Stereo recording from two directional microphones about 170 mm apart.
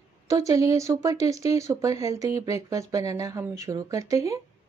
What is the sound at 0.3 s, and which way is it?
Speech, 20° right (ahead or behind).